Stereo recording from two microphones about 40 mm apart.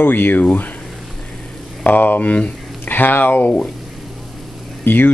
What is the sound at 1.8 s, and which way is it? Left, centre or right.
Speech, left.